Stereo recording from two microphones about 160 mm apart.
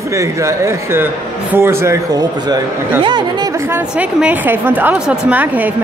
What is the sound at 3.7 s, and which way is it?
A woman's voice, 10° right (ahead or behind).